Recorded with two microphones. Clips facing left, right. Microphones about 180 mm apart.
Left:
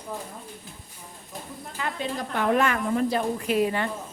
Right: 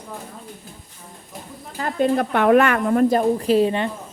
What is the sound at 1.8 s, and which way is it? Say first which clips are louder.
A woman's voice: right 11 dB; 45° right (ahead or behind).